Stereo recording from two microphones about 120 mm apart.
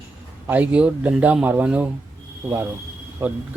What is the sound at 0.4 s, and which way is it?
Speech, 15° right (ahead or behind).